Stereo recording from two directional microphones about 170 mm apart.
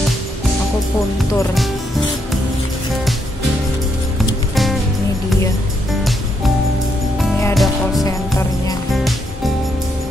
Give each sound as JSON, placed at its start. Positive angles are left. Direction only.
{"t": 1.5, "sound": "speech", "side_deg": 0}
{"t": 7.5, "sound": "music", "side_deg": 0}
{"t": 8.0, "sound": "music", "side_deg": 20}
{"t": 8.9, "sound": "music", "side_deg": 0}